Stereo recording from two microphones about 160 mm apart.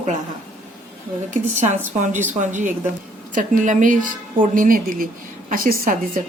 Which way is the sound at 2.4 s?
50° right (ahead or behind).